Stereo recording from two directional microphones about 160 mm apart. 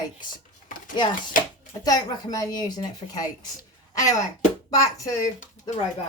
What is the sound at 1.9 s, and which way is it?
A woman's voice, 25° left (ahead or behind).